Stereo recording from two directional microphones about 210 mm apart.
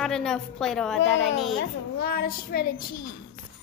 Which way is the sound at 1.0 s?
60° left (ahead or behind).